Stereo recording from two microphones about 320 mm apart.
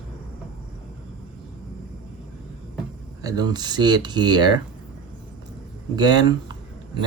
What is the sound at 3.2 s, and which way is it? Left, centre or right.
Speech, centre.